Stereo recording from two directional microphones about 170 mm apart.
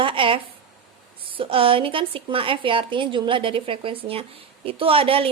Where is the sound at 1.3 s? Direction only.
30° right (ahead or behind).